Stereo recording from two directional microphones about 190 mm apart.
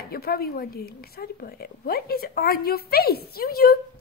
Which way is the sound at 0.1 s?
50° left (ahead or behind).